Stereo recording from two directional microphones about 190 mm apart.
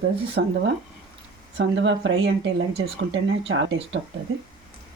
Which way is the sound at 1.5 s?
70° right (ahead or behind).